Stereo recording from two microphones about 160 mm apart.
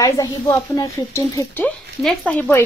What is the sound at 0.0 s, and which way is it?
Speech, 20° left (ahead or behind).